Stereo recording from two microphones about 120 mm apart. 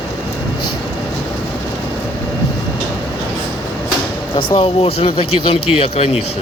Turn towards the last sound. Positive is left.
turn(degrees=55)  # may be behind; listen again after turning